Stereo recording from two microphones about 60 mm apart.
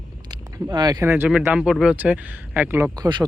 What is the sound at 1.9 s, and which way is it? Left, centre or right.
Speech, right.